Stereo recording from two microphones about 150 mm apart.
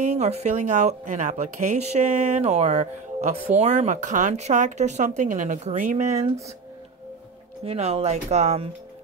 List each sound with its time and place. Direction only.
0.0 s speech: 50° right (ahead or behind)
7.6 s speech: 45° right (ahead or behind)